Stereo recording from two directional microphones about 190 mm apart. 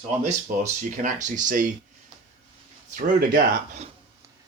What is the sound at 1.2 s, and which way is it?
Speech, 40° right (ahead or behind).